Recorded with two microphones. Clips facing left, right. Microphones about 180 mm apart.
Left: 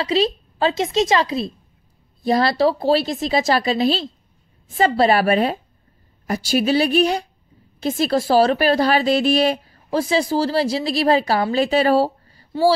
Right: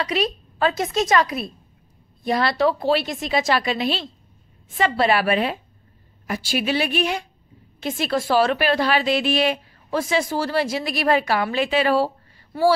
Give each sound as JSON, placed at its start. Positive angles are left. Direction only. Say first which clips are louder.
{"t": 0.0, "sound": "a woman's voice", "louder": "left 4 dB", "side_deg": 30}